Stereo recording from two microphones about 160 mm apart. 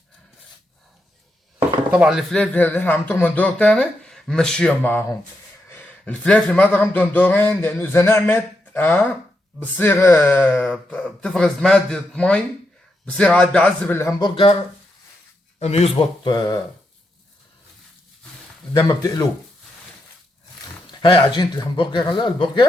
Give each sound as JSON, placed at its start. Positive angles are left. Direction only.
{"t": 1.9, "sound": "speech", "side_deg": -5}
{"t": 15.5, "sound": "a man's voice", "side_deg": 40}
{"t": 18.9, "sound": "speech", "side_deg": 25}
{"t": 21.0, "sound": "speech", "side_deg": 30}